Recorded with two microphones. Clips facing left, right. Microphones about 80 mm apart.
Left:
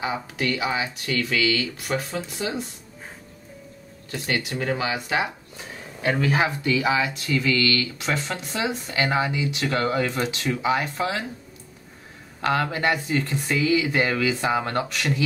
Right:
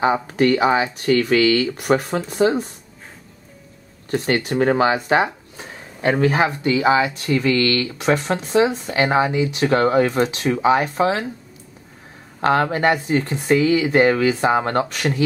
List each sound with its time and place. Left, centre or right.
0.0 s speech: right
4.1 s speech: right
7.3 s speech: right
12.4 s speech: right